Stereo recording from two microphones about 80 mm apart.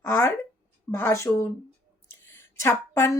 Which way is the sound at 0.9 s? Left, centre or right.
Left.